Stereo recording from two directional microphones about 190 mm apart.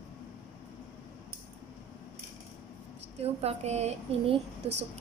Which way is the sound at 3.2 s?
35° right (ahead or behind).